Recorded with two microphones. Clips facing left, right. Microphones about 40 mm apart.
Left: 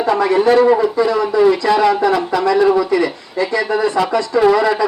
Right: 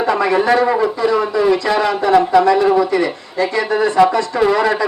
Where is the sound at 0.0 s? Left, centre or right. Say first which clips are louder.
Left 1 dB; right.